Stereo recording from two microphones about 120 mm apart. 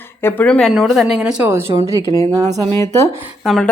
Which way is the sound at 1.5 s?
20° right (ahead or behind).